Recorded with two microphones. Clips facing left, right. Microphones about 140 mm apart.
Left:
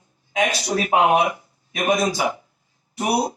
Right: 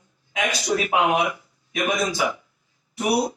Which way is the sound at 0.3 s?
35° left (ahead or behind).